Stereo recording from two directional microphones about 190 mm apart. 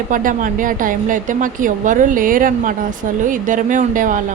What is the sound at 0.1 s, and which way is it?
A woman's voice, 45° right (ahead or behind).